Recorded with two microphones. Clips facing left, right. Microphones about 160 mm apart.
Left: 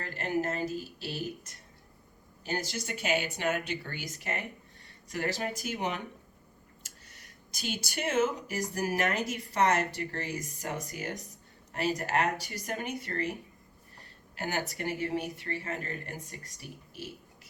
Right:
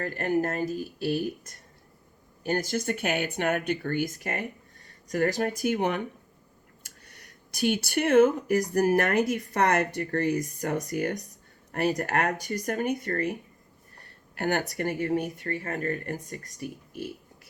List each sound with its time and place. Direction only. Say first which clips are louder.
0.0 s speech: right 5 dB; 50° right (ahead or behind)
14.0 s a sound: right 7 dB; 60° right (ahead or behind)
14.7 s speech: right 5 dB; 50° right (ahead or behind)